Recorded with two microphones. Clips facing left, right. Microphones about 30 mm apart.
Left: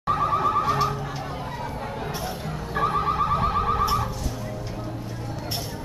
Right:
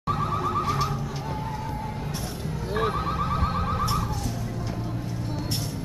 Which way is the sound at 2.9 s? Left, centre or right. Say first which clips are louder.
Left 4 dB; centre.